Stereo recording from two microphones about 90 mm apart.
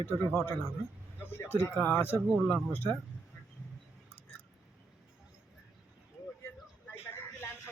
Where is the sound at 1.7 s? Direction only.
20° left (ahead or behind).